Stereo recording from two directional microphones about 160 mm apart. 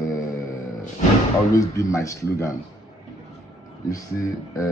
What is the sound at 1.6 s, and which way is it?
Speech, 20° left (ahead or behind).